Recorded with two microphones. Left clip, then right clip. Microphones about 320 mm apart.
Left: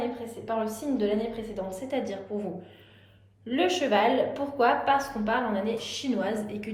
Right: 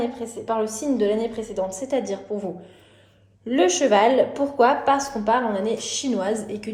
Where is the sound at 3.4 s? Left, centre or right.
Centre.